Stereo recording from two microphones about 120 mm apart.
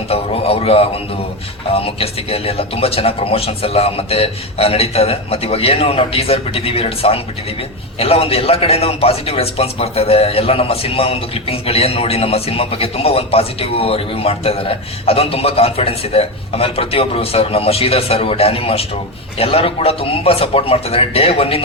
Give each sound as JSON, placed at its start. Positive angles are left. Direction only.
{"t": 0.1, "sound": "speech", "side_deg": 55}